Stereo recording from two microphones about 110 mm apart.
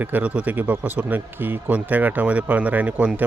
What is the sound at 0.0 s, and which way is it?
Speech, 15° right (ahead or behind).